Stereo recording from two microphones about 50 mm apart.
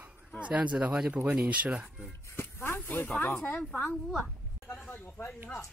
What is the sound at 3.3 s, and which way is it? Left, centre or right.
Speech, left.